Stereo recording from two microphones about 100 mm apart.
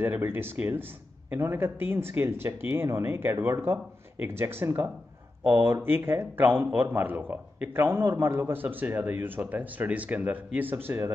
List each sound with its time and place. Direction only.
0.0 s a man's voice: 20° right (ahead or behind)